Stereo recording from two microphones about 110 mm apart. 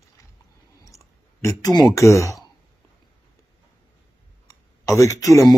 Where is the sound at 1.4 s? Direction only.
30° left (ahead or behind).